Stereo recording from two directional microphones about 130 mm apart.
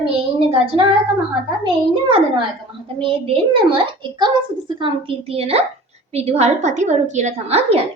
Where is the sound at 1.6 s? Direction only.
40° right (ahead or behind).